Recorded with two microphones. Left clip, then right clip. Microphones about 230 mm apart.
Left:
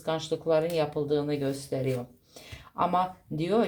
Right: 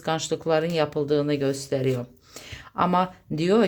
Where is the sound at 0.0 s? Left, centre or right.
Right.